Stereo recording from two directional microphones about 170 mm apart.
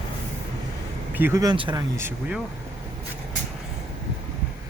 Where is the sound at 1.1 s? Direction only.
15° right (ahead or behind).